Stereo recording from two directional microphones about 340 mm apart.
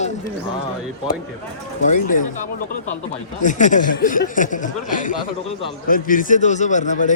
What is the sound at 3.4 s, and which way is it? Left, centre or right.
Speech, left.